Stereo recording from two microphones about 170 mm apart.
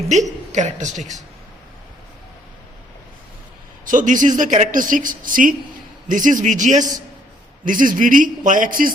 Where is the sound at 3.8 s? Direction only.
50° right (ahead or behind).